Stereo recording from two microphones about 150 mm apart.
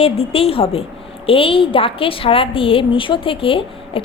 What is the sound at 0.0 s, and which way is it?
A woman's voice, 40° left (ahead or behind).